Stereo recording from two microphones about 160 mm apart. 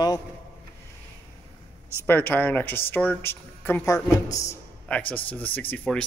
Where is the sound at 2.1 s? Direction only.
10° left (ahead or behind).